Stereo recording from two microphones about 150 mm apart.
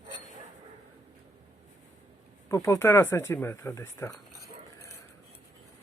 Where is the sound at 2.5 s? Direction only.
20° left (ahead or behind).